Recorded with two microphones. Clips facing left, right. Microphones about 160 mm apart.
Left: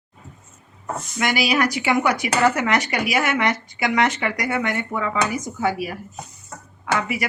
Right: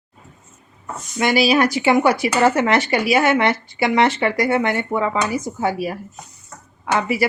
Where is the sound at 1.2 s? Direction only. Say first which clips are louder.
Right 5 dB; 30° right (ahead or behind).